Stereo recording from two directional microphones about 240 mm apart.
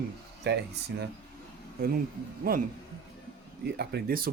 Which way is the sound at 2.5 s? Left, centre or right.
Right.